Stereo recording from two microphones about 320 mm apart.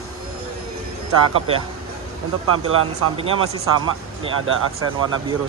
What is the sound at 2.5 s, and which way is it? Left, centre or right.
Speech, right.